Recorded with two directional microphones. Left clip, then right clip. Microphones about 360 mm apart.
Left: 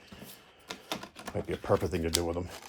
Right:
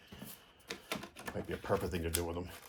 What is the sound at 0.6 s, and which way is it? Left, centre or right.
Typewriter, centre.